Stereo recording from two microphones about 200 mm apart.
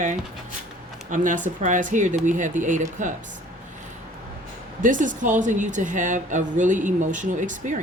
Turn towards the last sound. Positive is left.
turn(degrees=-40)  # may be behind; listen again after turning